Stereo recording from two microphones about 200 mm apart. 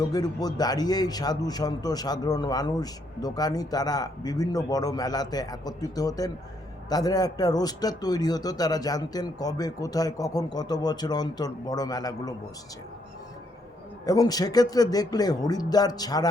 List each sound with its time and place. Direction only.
0.0 s a man's voice: 20° left (ahead or behind)
14.0 s a man's voice: 20° left (ahead or behind)